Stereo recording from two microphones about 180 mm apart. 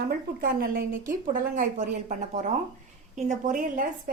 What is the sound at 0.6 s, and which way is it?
A woman's voice, 55° right (ahead or behind).